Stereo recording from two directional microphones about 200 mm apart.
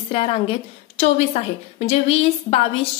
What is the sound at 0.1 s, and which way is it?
A woman's voice, 30° left (ahead or behind).